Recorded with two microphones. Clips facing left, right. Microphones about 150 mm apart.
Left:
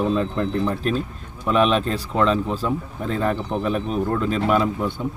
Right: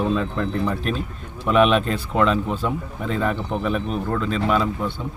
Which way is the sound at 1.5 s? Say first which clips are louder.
Right 1 dB; 5° right (ahead or behind).